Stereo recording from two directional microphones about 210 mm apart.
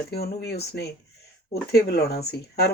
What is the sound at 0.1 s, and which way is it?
Speech, 50° left (ahead or behind).